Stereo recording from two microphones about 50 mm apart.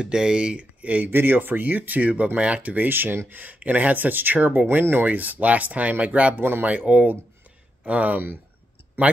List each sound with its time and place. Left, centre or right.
0.0 s speech: centre; by 1.1 s right
1.1 s speech: right
4.6 s speech: right
5.0 s speech: right
6.3 s speech: right
6.9 s speech: right